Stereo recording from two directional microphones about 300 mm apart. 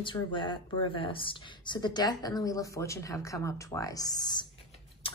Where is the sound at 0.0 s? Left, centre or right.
Centre.